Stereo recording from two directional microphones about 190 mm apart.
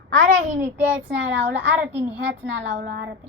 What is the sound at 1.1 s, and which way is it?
A child's voice, 75° right (ahead or behind).